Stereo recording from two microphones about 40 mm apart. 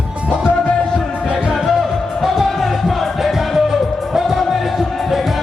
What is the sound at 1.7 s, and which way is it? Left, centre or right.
Music, centre.